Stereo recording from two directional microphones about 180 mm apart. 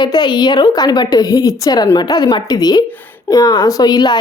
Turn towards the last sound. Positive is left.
turn(degrees=25)  # may be behind; listen again after turning